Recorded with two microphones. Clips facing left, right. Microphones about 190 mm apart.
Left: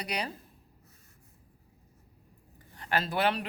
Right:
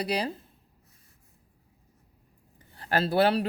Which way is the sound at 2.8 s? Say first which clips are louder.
Right 6 dB; 35° right (ahead or behind).